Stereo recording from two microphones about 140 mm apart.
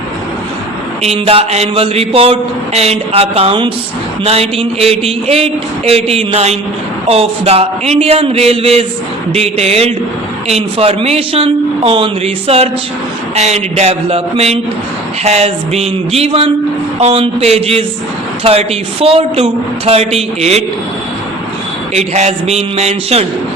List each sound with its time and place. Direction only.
1.0 s a man's voice: 45° right (ahead or behind)
21.9 s a man's voice: 50° right (ahead or behind)